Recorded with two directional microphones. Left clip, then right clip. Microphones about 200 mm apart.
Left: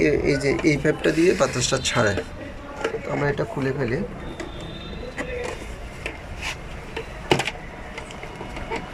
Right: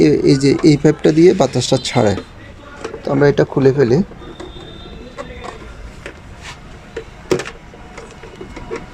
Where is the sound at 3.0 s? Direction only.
50° right (ahead or behind).